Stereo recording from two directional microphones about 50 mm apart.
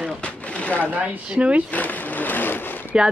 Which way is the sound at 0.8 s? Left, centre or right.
Right.